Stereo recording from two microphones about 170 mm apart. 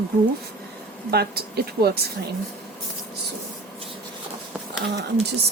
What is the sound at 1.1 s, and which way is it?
Speech, 70° right (ahead or behind).